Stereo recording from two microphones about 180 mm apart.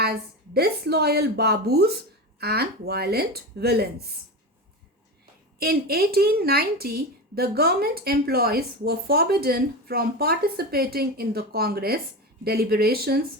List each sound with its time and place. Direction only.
0.0 s a woman's voice: 60° right (ahead or behind)
5.5 s a woman's voice: 60° right (ahead or behind)